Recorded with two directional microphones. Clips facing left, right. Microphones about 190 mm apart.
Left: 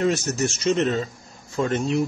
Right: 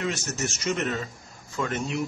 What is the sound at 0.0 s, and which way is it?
Speech, 35° left (ahead or behind).